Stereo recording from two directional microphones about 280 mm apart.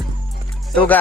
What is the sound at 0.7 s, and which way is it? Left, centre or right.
Speech, centre.